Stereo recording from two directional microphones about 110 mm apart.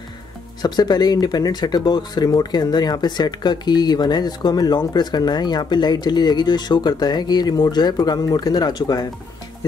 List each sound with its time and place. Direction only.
0.6 s speech: 40° left (ahead or behind)